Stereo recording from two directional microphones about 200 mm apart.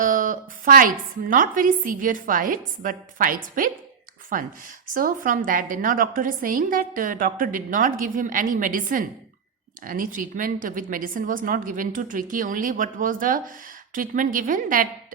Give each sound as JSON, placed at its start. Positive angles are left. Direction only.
{"t": 0.0, "sound": "a woman's voice", "side_deg": -40}